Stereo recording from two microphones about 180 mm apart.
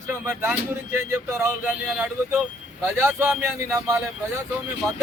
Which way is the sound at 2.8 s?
15° right (ahead or behind).